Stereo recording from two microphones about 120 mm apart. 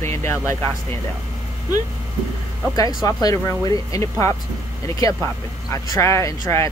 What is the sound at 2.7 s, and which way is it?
Speech, 30° left (ahead or behind).